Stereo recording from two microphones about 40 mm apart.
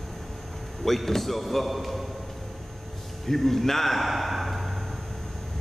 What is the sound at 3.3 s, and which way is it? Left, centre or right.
Speech, centre.